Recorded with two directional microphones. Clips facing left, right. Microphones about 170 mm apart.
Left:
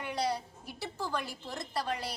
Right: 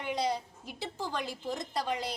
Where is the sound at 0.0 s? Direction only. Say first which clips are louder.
Right 1 dB; 20° right (ahead or behind).